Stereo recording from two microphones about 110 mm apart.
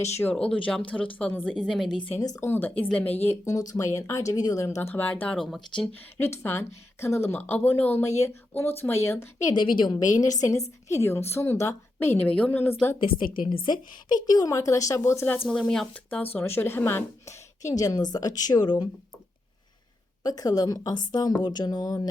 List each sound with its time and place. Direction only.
0.0 s speech: 20° left (ahead or behind)
0.3 s speech: 10° left (ahead or behind)
2.2 s a woman's voice: 30° left (ahead or behind)
2.5 s speech: 15° left (ahead or behind)
3.5 s speech: 30° left (ahead or behind); by 5.4 s 15° left (ahead or behind)
5.4 s speech: 5° left (ahead or behind)
6.1 s speech: 25° left (ahead or behind)
9.6 s a woman's voice: 45° left (ahead or behind); by 12.7 s 15° left (ahead or behind)
13.1 s a woman's voice: 50° left (ahead or behind)
14.1 s speech: 35° left (ahead or behind)
15.4 s a woman's voice: 10° left (ahead or behind); by 18.9 s 40° left (ahead or behind)
20.2 s a woman's voice: 35° left (ahead or behind)